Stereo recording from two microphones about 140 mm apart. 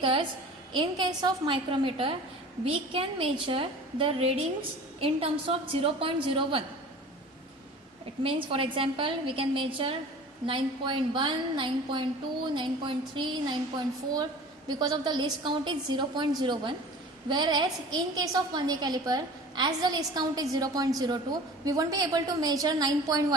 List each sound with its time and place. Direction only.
0.0 s a woman's voice: 40° right (ahead or behind)
8.2 s a woman's voice: 40° right (ahead or behind)